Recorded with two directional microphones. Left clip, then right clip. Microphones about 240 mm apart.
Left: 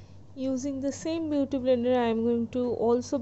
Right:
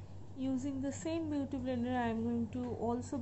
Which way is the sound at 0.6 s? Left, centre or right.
Left.